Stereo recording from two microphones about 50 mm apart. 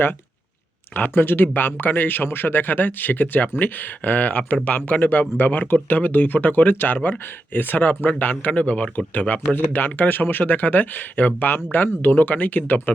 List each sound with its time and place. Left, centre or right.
0.9 s speech: left
9.7 s speech: left